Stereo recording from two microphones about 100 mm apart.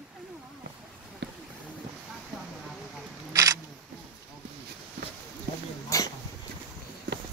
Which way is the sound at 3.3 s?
35° right (ahead or behind).